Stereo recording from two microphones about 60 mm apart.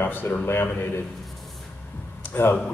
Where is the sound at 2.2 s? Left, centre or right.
Left.